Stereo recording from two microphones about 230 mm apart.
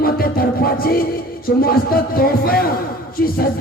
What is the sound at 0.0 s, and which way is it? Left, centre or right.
Music, left.